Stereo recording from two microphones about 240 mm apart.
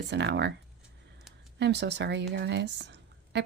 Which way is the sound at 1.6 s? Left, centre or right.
Right.